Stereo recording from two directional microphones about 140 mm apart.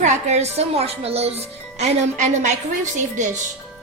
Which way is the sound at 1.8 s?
55° right (ahead or behind).